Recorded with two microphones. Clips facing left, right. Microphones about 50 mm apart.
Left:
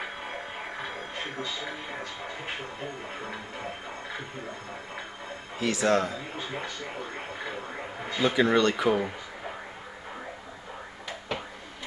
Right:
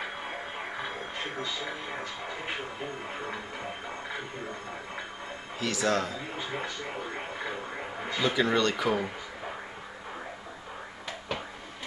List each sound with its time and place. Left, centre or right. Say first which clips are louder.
1.7 s speech: even; centre
5.6 s speech: left 3 dB; left
6.1 s speech: even; centre
8.2 s speech: left 3 dB; centre